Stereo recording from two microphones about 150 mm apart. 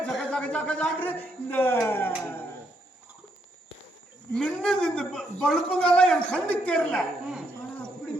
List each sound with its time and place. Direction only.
0.0 s speech: 5° left (ahead or behind)
4.4 s a man's voice: 5° left (ahead or behind)